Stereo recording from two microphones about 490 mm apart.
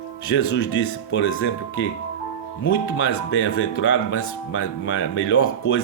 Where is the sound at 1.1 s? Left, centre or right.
Left.